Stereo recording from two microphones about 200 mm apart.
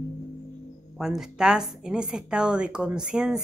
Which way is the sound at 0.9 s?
5° right (ahead or behind).